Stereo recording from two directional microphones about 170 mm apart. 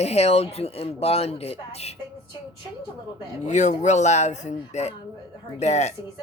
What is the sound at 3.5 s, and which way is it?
Speech, 45° left (ahead or behind).